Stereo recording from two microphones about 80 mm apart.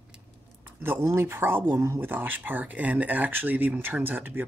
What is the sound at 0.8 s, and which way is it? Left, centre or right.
Speech, right.